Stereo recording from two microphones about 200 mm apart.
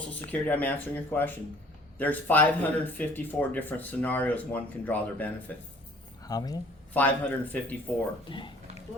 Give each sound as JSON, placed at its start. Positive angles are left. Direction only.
{"t": 0.1, "sound": "speech", "side_deg": 5}
{"t": 6.9, "sound": "speech", "side_deg": 10}
{"t": 8.3, "sound": "speech", "side_deg": 25}